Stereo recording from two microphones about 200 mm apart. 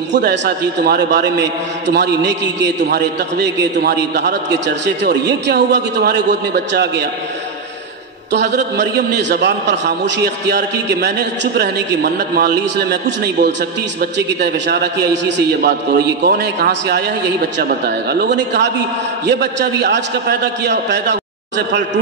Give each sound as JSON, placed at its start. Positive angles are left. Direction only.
{"t": 0.1, "sound": "a man's voice", "side_deg": -60}
{"t": 8.3, "sound": "a man's voice", "side_deg": -60}